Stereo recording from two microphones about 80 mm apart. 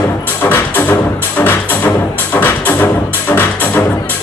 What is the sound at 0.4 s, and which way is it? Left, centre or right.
Music, left.